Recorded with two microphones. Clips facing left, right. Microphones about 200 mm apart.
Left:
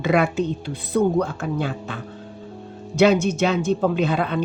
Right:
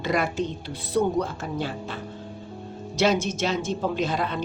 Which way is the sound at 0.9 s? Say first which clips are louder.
Left 4 dB; 55° left (ahead or behind).